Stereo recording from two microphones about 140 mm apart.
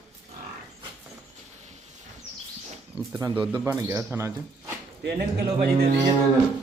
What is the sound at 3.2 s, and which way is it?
Speech, 30° right (ahead or behind).